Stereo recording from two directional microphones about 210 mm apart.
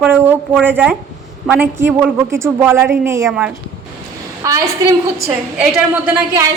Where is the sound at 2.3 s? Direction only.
10° right (ahead or behind).